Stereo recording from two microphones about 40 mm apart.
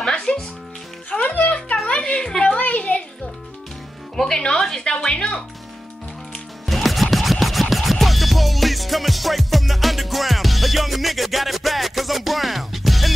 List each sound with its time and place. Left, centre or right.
0.0 s music: centre
1.1 s music: left
1.9 s a sound: left
2.5 s a sound: left
4.2 s speech: centre
4.9 s speech: left
6.6 s music: centre